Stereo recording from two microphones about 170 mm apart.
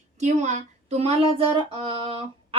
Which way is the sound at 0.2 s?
45° right (ahead or behind).